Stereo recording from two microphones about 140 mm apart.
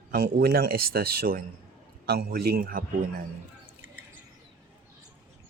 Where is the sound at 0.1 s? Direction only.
90° right.